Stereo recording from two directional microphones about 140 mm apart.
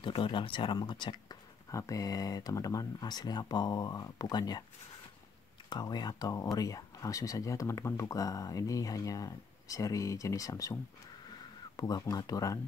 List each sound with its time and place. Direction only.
0.0 s speech: 35° left (ahead or behind)
5.7 s speech: 30° left (ahead or behind)